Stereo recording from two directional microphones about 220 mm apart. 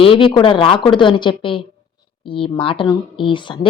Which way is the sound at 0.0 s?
25° left (ahead or behind).